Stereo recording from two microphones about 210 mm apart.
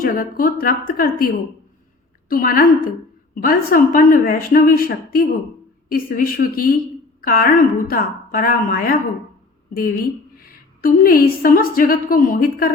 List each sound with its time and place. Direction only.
0.0 s a woman's voice: 40° left (ahead or behind)
2.3 s a woman's voice: 45° left (ahead or behind)